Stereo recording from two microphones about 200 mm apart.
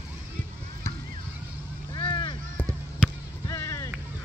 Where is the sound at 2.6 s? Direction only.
15° left (ahead or behind).